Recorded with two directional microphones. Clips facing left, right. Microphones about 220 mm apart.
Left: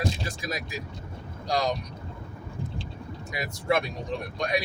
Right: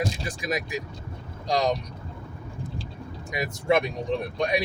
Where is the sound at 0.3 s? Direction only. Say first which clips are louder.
Right 4 dB; 20° right (ahead or behind).